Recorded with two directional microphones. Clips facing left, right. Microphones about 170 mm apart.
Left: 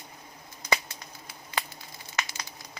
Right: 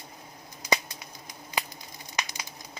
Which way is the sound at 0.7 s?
15° right (ahead or behind).